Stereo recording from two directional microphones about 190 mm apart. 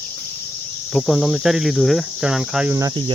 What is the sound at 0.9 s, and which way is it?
Cricket, centre (ahead or behind).